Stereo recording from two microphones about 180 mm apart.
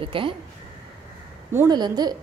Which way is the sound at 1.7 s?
25° right (ahead or behind).